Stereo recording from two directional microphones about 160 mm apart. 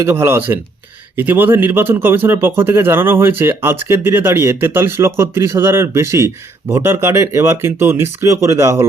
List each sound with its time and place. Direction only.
0.0 s speech: 15° right (ahead or behind)